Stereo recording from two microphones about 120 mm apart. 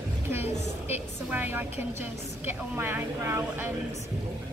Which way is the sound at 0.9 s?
15° right (ahead or behind).